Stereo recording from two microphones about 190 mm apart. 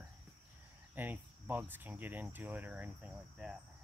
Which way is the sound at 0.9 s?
10° right (ahead or behind).